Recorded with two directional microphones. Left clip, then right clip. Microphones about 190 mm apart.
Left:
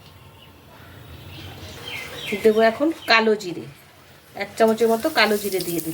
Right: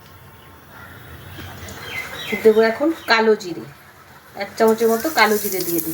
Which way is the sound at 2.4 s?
30° left (ahead or behind).